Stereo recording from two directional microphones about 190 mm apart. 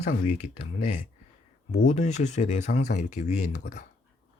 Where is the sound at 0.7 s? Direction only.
40° left (ahead or behind).